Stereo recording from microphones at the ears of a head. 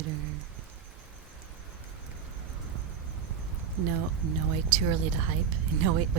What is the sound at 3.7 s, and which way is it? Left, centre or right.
Speech, right.